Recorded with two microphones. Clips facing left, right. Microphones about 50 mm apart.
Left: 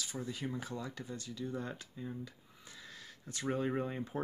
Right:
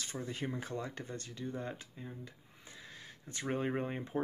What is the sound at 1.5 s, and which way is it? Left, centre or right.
Speech, right.